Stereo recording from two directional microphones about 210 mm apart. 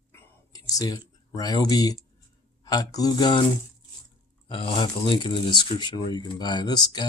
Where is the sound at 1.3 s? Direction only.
20° left (ahead or behind).